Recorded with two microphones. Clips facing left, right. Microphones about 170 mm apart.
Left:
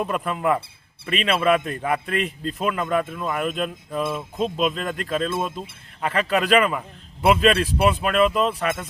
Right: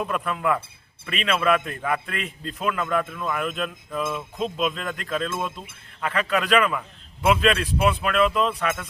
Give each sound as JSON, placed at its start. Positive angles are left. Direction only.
{"t": 0.1, "sound": "a man's voice", "side_deg": 30}